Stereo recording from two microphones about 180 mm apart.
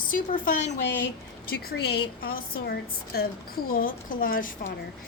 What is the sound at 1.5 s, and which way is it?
A woman's voice, 60° left (ahead or behind).